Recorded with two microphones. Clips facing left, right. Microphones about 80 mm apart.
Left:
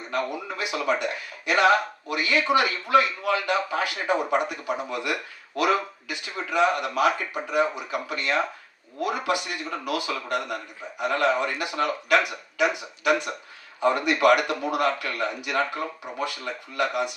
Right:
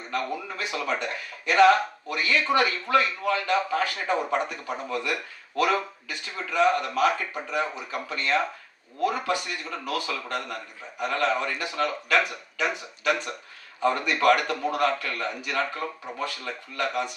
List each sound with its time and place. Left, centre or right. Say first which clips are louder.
0.1 s a man's voice: left 1 dB; centre
16.5 s a man's voice: left 5 dB; centre